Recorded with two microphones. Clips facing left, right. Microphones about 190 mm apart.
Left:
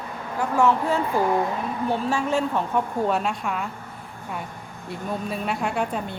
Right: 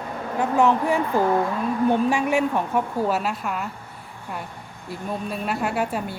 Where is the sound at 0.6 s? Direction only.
15° right (ahead or behind).